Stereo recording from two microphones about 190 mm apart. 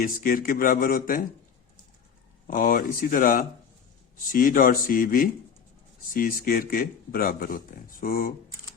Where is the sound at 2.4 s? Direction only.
45° left (ahead or behind).